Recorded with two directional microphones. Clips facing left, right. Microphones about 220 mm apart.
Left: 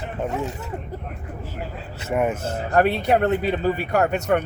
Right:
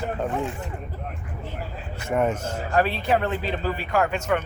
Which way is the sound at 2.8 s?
55° left (ahead or behind).